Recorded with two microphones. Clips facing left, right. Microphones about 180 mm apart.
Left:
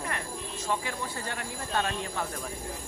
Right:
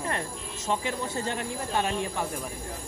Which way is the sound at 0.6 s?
20° right (ahead or behind).